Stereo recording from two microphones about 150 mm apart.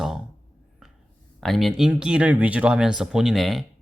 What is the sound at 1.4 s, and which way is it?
Speech, centre (ahead or behind).